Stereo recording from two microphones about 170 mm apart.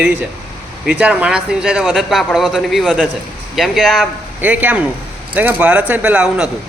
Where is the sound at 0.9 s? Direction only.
5° right (ahead or behind).